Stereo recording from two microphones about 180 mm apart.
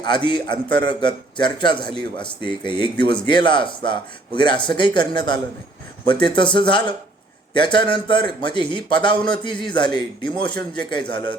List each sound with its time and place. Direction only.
0.0 s speech: 25° left (ahead or behind)